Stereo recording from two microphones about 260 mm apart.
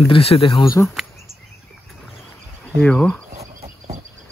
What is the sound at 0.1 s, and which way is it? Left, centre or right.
Speech, left.